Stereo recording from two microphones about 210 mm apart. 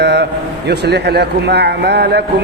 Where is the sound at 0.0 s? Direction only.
55° right (ahead or behind).